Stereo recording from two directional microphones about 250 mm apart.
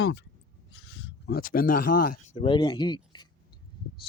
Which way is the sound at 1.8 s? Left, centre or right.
Left.